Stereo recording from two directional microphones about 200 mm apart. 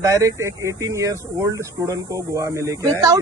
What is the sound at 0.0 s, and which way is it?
Speech, 15° right (ahead or behind).